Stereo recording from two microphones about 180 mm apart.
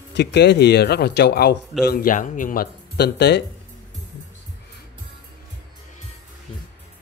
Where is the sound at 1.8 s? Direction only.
55° left (ahead or behind).